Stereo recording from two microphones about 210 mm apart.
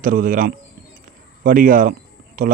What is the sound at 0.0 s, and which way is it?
A man's voice, 40° right (ahead or behind).